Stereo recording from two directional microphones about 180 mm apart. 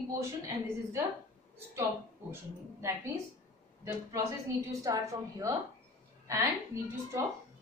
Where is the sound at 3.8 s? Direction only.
15° right (ahead or behind).